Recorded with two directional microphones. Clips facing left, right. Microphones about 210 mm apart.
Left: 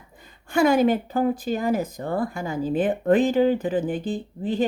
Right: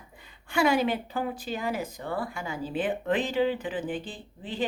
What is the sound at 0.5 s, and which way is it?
Speech, 45° left (ahead or behind).